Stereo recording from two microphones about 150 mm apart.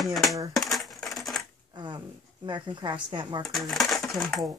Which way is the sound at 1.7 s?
30° right (ahead or behind).